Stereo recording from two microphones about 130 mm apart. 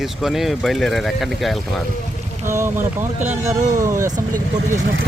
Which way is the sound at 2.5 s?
20° right (ahead or behind).